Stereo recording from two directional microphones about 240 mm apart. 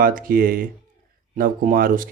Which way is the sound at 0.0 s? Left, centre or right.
Right.